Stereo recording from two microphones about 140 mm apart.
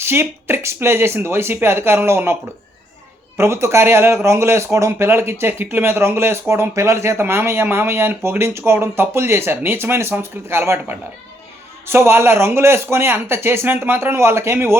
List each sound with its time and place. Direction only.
0.0 s speech: 15° right (ahead or behind)